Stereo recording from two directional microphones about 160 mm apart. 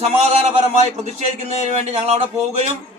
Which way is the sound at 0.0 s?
40° right (ahead or behind).